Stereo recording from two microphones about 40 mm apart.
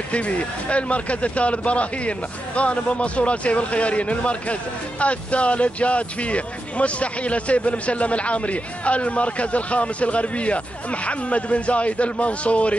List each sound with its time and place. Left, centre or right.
0.1 s a man's voice: left